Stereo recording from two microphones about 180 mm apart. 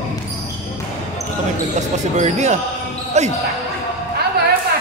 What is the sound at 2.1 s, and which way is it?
Speech, 40° right (ahead or behind).